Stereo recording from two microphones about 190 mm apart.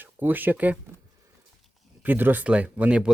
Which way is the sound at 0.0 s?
10° right (ahead or behind).